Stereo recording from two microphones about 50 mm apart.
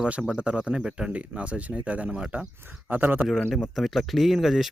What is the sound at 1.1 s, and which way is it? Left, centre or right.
Speech, right.